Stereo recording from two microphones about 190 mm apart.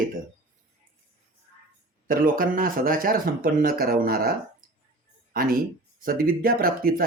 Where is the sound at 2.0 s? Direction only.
50° right (ahead or behind).